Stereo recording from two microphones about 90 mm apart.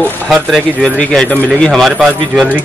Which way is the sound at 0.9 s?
10° left (ahead or behind).